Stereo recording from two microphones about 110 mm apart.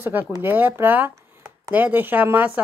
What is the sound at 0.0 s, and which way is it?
Speech, 20° right (ahead or behind).